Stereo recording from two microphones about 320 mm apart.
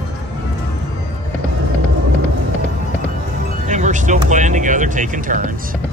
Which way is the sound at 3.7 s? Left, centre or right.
Right.